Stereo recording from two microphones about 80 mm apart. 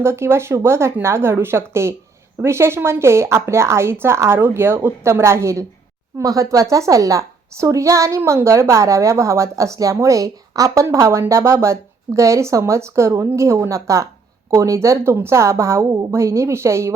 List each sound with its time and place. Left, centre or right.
0.0 s a woman's voice: right